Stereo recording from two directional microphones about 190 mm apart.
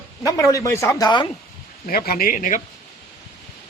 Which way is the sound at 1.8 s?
50° left (ahead or behind).